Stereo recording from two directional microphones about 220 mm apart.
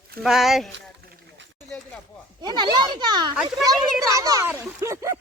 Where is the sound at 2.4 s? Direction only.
20° right (ahead or behind).